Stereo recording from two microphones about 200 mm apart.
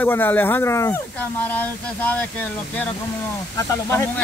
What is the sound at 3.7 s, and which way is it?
Speech, 15° left (ahead or behind).